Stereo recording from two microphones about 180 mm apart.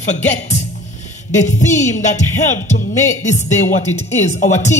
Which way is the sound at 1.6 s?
40° left (ahead or behind).